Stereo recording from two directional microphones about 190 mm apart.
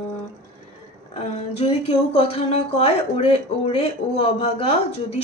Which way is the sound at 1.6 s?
30° left (ahead or behind).